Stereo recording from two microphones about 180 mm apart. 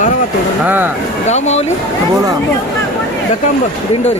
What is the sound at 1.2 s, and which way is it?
Speech, 40° left (ahead or behind).